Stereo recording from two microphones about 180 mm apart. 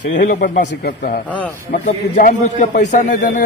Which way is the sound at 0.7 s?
60° left (ahead or behind).